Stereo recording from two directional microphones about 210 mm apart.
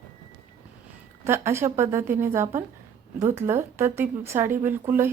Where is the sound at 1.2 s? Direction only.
10° right (ahead or behind).